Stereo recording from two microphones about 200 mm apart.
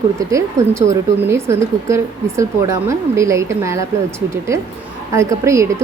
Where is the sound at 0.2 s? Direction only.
15° right (ahead or behind).